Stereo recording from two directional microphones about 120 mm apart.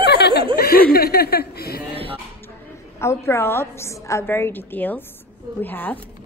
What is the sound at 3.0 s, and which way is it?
A woman's voice, 20° left (ahead or behind).